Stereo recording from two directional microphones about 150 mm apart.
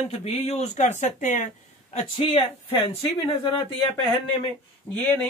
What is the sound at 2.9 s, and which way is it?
Speech, 45° left (ahead or behind).